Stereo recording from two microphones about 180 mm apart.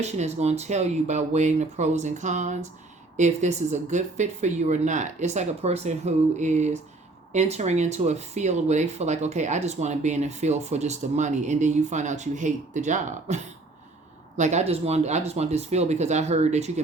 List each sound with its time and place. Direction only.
0.0 s speech: 35° right (ahead or behind)